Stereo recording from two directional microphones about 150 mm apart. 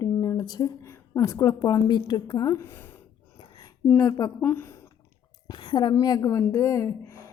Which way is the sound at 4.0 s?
25° left (ahead or behind).